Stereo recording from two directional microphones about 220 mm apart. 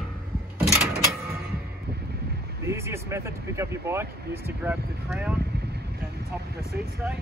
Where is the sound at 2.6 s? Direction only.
10° right (ahead or behind).